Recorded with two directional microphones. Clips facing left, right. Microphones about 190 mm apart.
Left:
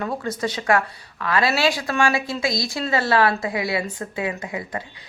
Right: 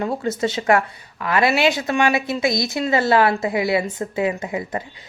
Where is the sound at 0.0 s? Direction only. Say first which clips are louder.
Right 4 dB; 25° right (ahead or behind).